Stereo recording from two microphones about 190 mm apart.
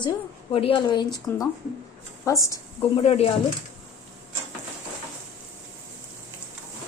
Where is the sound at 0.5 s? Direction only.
30° left (ahead or behind).